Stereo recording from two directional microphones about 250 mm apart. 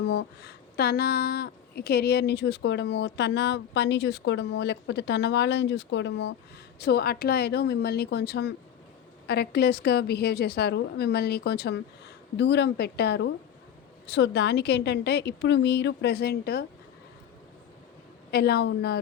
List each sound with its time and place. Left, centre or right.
0.0 s a woman's voice: left
18.3 s a woman's voice: left